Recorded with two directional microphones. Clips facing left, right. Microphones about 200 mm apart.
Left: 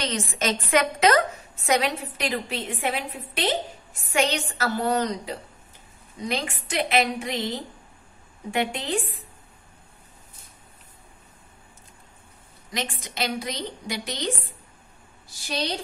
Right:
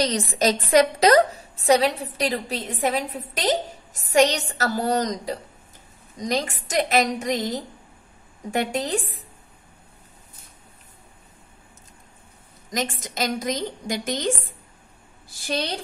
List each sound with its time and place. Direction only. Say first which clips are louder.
0.0 s a woman's voice: right 6 dB; 35° right (ahead or behind)
12.6 s a woman's voice: right 4 dB; 45° right (ahead or behind)